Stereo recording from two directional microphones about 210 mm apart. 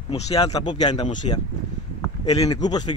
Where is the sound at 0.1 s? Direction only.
30° left (ahead or behind).